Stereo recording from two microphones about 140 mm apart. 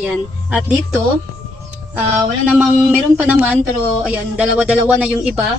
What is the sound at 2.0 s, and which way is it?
A woman's voice, 10° right (ahead or behind).